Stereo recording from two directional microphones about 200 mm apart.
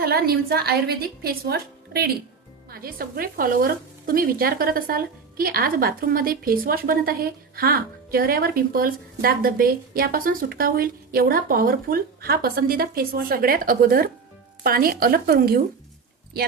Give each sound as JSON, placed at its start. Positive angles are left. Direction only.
{"t": 0.0, "sound": "speech", "side_deg": -50}